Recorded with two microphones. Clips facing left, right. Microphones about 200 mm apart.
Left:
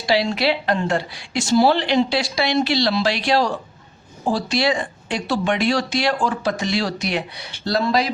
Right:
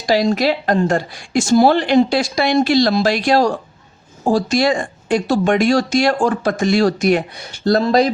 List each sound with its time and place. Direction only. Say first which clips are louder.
0.0 s speech: right 4 dB; 45° right (ahead or behind)